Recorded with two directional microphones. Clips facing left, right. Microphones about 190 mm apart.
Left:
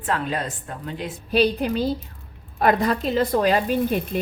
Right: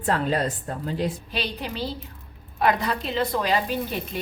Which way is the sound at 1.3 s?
45° left (ahead or behind).